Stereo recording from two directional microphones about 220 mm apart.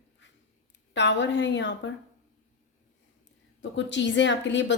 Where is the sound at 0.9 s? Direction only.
55° left (ahead or behind).